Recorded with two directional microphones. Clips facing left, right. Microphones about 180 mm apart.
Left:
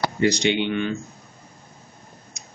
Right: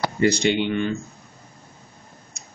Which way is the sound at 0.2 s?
5° right (ahead or behind).